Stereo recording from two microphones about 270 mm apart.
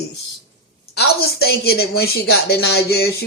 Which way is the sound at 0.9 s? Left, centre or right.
Left.